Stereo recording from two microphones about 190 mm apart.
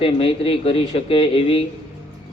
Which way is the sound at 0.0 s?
30° left (ahead or behind).